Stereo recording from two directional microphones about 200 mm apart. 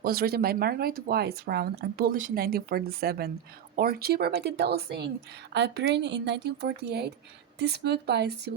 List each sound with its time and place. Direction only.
0.0 s speech: 50° right (ahead or behind)